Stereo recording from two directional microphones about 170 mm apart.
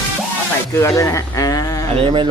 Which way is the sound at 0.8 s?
20° left (ahead or behind).